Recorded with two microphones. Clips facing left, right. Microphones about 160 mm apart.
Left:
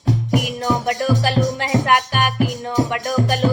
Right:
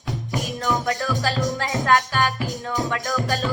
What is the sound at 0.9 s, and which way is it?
Music, 20° left (ahead or behind).